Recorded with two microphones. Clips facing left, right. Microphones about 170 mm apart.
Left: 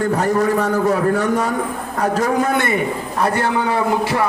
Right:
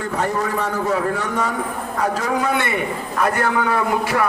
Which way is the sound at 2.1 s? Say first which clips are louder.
Left 6 dB; 45° left (ahead or behind).